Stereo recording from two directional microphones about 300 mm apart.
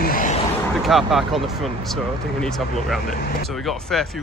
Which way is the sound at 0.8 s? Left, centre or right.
Centre.